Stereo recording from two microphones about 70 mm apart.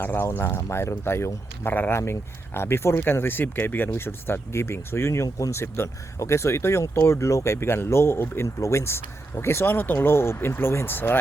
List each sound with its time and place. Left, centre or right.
0.0 s speech: left
1.7 s speech: left
2.0 s speech: left